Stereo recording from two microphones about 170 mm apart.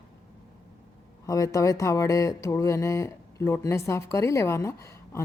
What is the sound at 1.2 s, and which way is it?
Speech, 20° left (ahead or behind).